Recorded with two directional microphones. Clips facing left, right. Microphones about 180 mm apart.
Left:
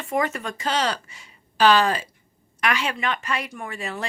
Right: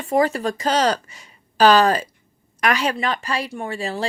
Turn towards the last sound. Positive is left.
turn(degrees=-30)  # may be behind; listen again after turning